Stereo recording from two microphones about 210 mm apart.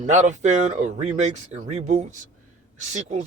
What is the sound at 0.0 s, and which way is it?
Speech, 35° right (ahead or behind).